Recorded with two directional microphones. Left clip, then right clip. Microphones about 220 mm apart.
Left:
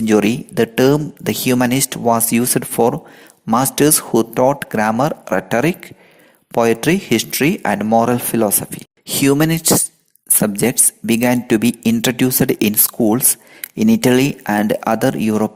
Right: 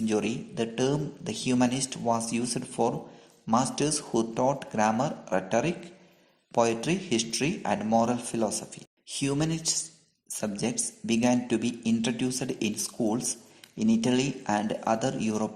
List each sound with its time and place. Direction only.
0.0 s speech: 45° left (ahead or behind)